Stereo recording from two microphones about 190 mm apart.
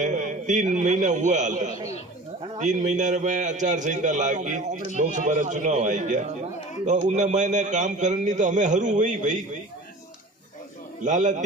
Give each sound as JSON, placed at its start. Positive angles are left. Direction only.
{"t": 0.0, "sound": "a man's voice", "side_deg": -40}
{"t": 11.0, "sound": "a man's voice", "side_deg": -40}